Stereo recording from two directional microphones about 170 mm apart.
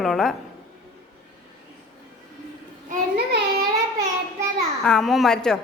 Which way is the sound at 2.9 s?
60° right (ahead or behind).